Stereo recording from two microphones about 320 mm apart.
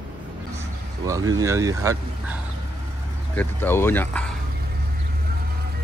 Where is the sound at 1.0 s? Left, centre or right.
Centre.